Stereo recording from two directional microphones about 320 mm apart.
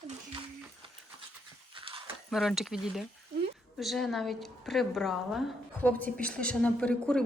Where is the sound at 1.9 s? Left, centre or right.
Centre.